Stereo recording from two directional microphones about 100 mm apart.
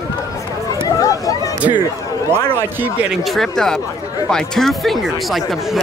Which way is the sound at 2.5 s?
20° right (ahead or behind).